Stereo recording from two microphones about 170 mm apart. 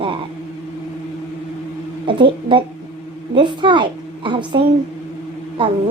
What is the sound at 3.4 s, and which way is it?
A woman's voice, 30° right (ahead or behind).